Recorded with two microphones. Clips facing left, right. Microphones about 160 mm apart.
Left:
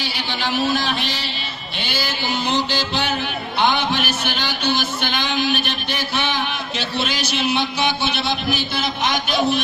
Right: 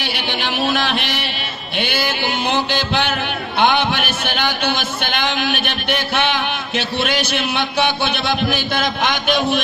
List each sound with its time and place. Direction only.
0.0 s a man's voice: 65° right (ahead or behind)